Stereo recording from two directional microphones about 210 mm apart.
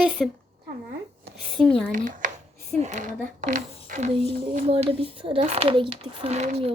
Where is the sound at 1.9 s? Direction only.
40° right (ahead or behind).